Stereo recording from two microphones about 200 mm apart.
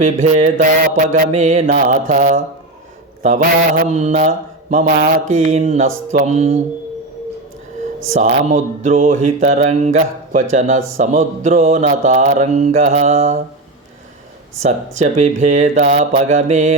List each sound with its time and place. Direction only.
0.0 s mantra: 35° right (ahead or behind)
8.1 s mantra: 35° right (ahead or behind)
14.6 s mantra: 35° right (ahead or behind)